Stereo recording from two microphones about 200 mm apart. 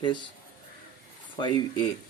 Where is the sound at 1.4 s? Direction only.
20° left (ahead or behind).